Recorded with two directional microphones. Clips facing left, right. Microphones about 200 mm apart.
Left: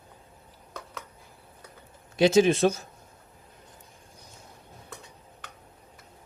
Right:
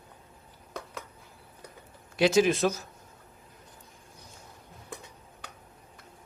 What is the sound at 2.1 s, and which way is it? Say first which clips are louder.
Speech: left 3 dB; 25° left (ahead or behind).